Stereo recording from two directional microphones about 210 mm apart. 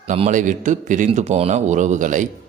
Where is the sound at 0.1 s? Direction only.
35° right (ahead or behind).